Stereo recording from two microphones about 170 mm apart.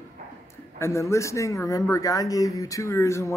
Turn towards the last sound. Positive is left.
turn(degrees=15)  # may be behind; listen again after turning